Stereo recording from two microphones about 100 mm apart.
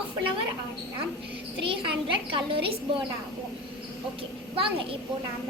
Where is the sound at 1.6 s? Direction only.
55° right (ahead or behind).